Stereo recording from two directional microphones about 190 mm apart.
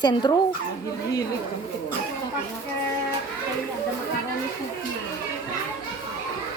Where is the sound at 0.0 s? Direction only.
20° left (ahead or behind).